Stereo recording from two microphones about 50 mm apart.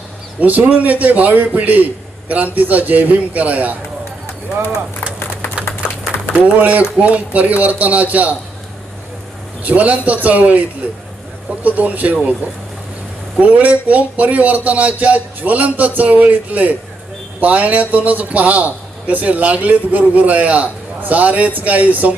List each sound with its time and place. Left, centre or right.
0.3 s a man's voice: right
6.3 s a man's voice: right
9.6 s a man's voice: right
13.4 s a man's voice: right